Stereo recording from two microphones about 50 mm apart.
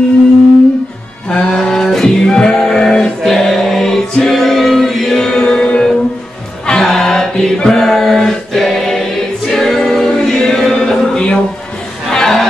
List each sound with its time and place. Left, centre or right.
1.3 s music: centre
3.3 s choir: centre
6.6 s music: centre
6.9 s chant: centre
9.5 s choir: centre
12.1 s a sound: centre